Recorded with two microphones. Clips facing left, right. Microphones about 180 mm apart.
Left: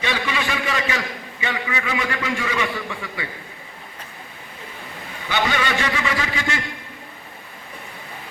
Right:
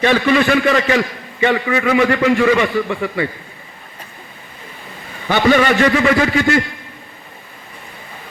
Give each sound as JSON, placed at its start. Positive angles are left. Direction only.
{"t": 0.0, "sound": "a man's voice", "side_deg": -55}
{"t": 5.3, "sound": "a man's voice", "side_deg": -55}